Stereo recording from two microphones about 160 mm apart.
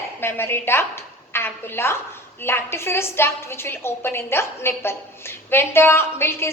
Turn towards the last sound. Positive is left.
turn(degrees=15)  # may be behind; listen again after turning